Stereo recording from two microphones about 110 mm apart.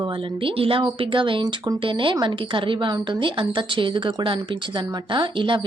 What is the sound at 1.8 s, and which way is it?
A woman's voice, 50° right (ahead or behind).